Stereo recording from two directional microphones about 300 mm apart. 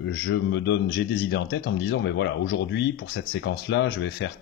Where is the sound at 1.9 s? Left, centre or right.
Left.